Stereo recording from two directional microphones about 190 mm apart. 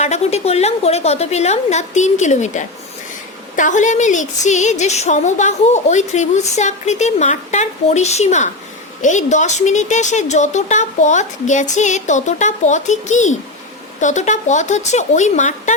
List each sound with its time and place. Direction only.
0.0 s a woman's voice: 35° left (ahead or behind)